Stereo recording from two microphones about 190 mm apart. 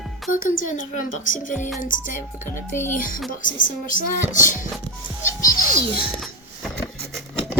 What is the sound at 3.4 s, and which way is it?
Speech, 45° left (ahead or behind).